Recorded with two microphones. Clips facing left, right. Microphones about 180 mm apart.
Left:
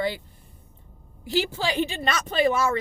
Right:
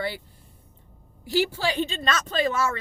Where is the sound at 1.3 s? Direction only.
20° left (ahead or behind).